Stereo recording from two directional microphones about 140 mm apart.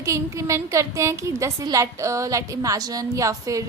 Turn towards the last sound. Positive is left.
turn(degrees=-25)  # may be behind; listen again after turning